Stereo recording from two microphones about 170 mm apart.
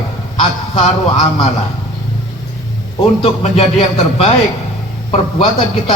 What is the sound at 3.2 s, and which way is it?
Speech, 35° left (ahead or behind).